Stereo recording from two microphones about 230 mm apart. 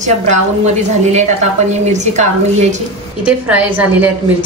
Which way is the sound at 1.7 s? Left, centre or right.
Right.